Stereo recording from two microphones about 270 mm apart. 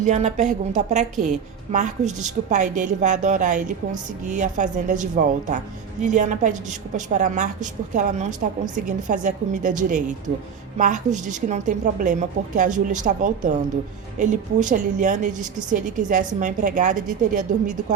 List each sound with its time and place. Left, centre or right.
0.0 s a woman's voice: right